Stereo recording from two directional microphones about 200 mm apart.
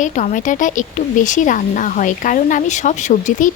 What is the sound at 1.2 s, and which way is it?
Speech, 40° left (ahead or behind).